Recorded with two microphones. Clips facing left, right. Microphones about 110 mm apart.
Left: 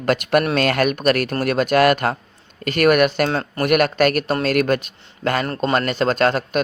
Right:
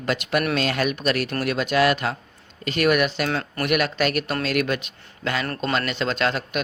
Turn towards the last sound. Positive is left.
turn(degrees=45)  # may be behind; listen again after turning